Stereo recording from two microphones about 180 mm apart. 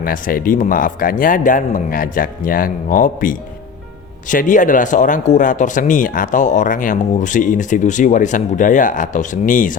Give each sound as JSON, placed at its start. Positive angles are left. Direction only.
{"t": 0.0, "sound": "speech", "side_deg": 55}